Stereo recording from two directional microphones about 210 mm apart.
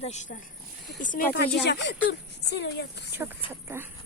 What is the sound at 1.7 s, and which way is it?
A woman's voice, 55° left (ahead or behind).